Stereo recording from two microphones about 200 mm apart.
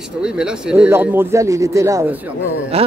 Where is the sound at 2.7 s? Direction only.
30° right (ahead or behind).